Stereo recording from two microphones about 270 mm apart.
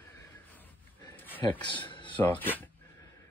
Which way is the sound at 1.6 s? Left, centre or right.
Centre.